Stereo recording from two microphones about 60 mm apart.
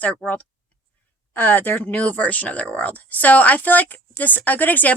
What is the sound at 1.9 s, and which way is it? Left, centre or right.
Speech, left.